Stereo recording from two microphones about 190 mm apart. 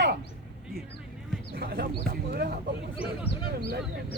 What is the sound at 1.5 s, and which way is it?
Speech, 55° right (ahead or behind).